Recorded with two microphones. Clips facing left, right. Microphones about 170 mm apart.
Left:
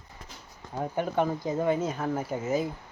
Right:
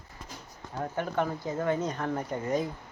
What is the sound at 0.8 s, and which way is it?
Speech, 15° left (ahead or behind).